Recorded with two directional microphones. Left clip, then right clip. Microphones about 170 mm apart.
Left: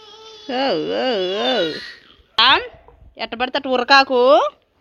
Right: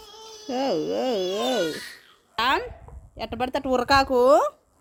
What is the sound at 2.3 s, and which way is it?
Speech, 10° right (ahead or behind).